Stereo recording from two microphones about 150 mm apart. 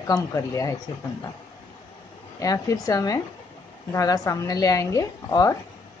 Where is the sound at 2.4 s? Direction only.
25° left (ahead or behind).